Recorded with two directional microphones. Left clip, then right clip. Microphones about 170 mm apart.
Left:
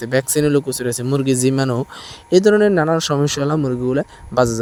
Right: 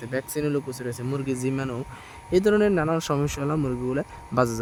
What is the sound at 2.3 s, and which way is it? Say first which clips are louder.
Speech: left 8 dB; 30° left (ahead or behind).